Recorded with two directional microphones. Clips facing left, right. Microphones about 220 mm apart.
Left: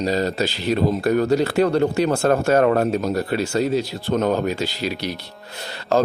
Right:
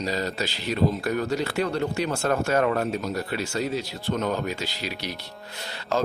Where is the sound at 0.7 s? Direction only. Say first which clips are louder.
Left 5 dB; 50° left (ahead or behind).